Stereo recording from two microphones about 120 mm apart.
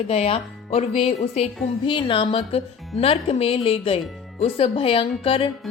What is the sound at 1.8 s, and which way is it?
Speech, 45° left (ahead or behind).